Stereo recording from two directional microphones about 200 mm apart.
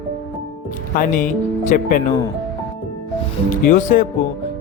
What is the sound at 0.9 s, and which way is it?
Speech, 45° left (ahead or behind).